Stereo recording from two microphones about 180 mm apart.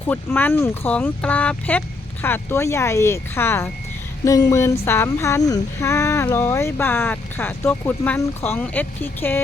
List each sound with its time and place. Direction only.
0.1 s speech: 10° left (ahead or behind)